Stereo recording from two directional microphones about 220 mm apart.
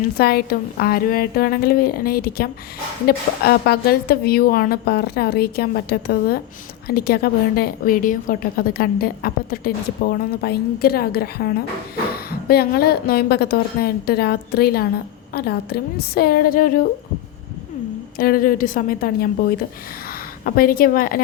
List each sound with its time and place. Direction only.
0.2 s a woman's voice: 45° left (ahead or behind)
18.2 s a woman's voice: 40° left (ahead or behind)